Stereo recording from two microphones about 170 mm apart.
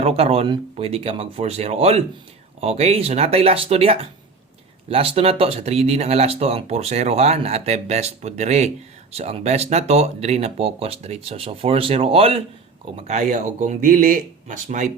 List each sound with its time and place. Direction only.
0.0 s speech: 35° right (ahead or behind)